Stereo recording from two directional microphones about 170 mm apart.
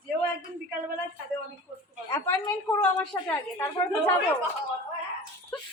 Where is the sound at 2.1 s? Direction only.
15° left (ahead or behind).